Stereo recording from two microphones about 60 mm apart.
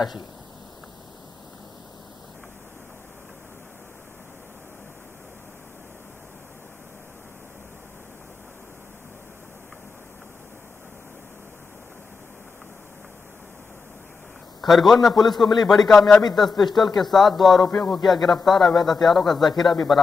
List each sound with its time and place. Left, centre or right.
14.6 s a man's voice: centre